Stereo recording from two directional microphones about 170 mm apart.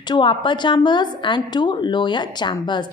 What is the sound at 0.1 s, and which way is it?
A woman's voice, 30° left (ahead or behind).